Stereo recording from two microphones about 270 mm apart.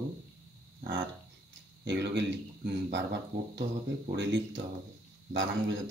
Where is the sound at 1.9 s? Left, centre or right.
Right.